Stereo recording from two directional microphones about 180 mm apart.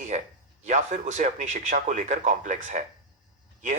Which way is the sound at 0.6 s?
40° right (ahead or behind).